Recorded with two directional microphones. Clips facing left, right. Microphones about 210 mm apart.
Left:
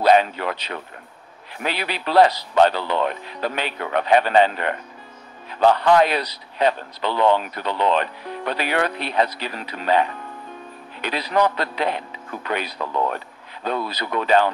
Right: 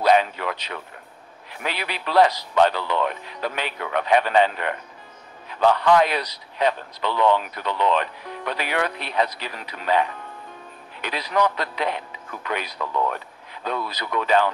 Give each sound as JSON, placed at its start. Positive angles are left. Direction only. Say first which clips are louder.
{"t": 0.0, "sound": "a man's voice", "louder": "left 2 dB", "side_deg": 35}